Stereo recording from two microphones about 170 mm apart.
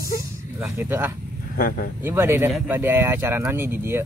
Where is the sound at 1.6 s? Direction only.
60° left (ahead or behind).